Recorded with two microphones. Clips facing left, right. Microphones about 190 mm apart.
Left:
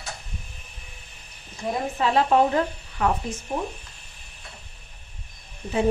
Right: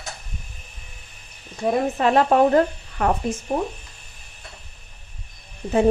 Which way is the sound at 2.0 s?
50° right (ahead or behind).